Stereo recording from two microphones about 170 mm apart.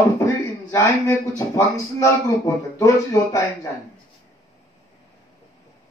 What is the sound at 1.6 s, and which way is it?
A man's voice, 20° left (ahead or behind).